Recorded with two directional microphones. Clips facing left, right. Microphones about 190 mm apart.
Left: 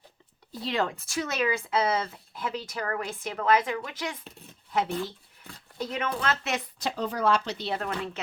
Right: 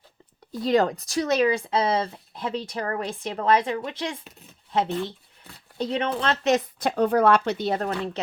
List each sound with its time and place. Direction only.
0.6 s speech: 40° right (ahead or behind)
5.7 s speech: 30° right (ahead or behind)
6.7 s speech: 55° right (ahead or behind); by 8.2 s 35° right (ahead or behind)